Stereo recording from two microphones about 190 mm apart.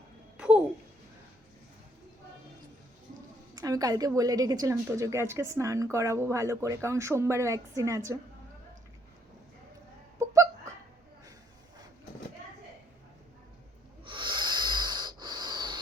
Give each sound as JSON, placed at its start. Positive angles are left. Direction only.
{"t": 0.3, "sound": "a sound", "side_deg": -5}
{"t": 3.6, "sound": "a woman's voice", "side_deg": -20}
{"t": 10.2, "sound": "hiccup", "side_deg": -15}
{"t": 14.0, "sound": "snort", "side_deg": -25}